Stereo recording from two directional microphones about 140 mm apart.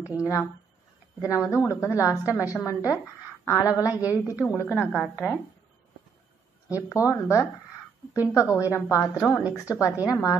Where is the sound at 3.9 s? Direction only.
10° right (ahead or behind).